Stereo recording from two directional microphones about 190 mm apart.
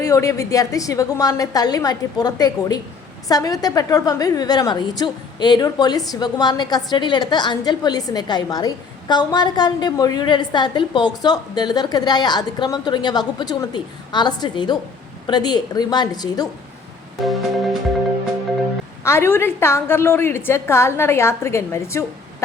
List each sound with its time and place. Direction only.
0.0 s a woman's voice: 15° left (ahead or behind)
19.0 s a woman's voice: 10° left (ahead or behind)